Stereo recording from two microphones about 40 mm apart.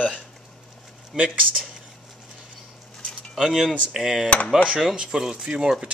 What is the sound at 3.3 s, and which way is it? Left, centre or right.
Speech, centre.